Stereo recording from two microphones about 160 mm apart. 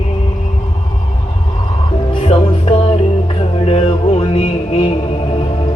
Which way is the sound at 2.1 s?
40° left (ahead or behind).